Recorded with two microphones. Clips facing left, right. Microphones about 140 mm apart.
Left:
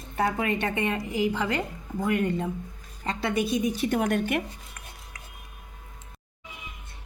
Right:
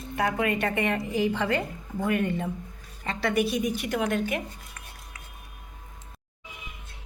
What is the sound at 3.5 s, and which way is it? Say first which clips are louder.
Speech: left 1 dB; 25° left (ahead or behind).